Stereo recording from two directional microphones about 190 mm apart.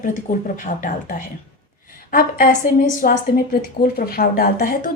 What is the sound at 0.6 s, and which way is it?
A woman's voice, 45° left (ahead or behind).